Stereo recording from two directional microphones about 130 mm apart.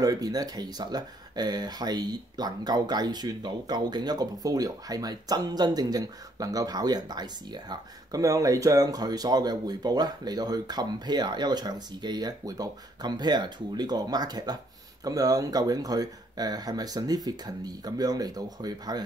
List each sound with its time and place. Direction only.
0.0 s speech: 30° right (ahead or behind)